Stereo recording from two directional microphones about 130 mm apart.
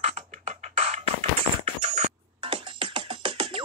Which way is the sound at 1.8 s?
55° right (ahead or behind).